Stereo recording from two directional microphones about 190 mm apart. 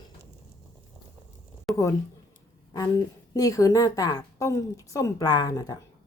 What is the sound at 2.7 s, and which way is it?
A woman's voice, 20° left (ahead or behind).